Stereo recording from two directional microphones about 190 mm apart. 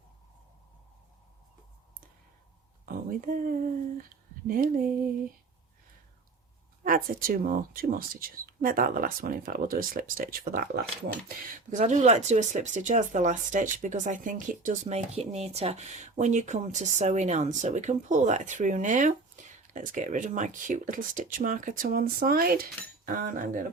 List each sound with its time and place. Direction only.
2.8 s speech: 50° right (ahead or behind)
6.8 s speech: 50° right (ahead or behind)
11.7 s speech: 40° right (ahead or behind)